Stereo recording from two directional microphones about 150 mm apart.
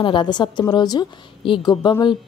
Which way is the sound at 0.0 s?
30° left (ahead or behind).